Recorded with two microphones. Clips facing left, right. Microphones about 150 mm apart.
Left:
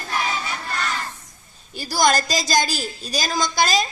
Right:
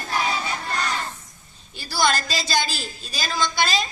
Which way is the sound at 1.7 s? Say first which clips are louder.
Left 3 dB; 40° left (ahead or behind).